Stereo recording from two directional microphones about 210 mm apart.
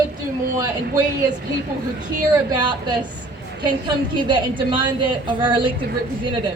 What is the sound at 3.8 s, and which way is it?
A woman's voice, 20° right (ahead or behind).